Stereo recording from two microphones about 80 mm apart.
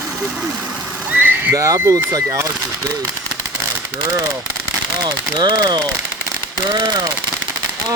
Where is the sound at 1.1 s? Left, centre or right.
Right.